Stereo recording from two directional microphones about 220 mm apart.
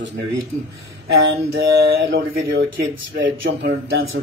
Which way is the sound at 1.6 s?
45° right (ahead or behind).